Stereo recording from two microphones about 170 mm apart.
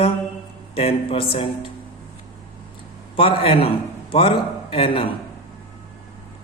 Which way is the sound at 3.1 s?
35° left (ahead or behind).